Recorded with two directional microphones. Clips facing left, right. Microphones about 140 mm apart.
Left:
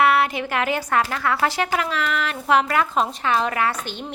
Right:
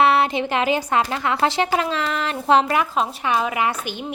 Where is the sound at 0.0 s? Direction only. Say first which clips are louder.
Right 1 dB; 25° right (ahead or behind).